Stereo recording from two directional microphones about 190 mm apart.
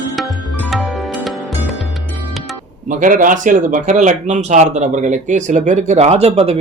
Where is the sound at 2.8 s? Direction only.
45° right (ahead or behind).